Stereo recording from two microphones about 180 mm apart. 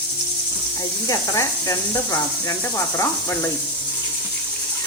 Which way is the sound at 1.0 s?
20° left (ahead or behind).